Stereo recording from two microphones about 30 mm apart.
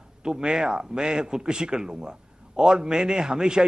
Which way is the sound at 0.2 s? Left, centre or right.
Right.